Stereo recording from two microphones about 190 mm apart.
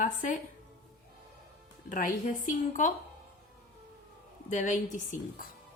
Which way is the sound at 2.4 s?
45° left (ahead or behind).